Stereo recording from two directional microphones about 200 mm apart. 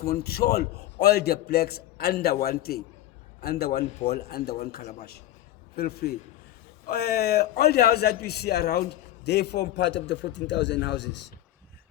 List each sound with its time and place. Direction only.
0.1 s a man's voice: 50° left (ahead or behind)
4.8 s a man's voice: 35° left (ahead or behind)
5.7 s a man's voice: 50° left (ahead or behind)